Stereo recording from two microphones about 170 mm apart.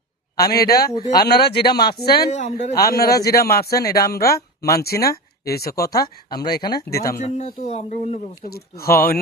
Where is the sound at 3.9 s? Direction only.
65° left (ahead or behind).